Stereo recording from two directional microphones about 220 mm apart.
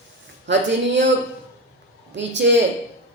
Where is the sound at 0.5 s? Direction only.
55° right (ahead or behind).